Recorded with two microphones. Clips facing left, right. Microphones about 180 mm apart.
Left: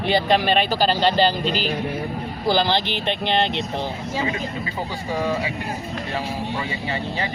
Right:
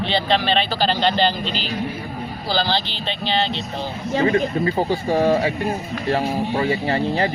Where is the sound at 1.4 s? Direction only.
45° left (ahead or behind).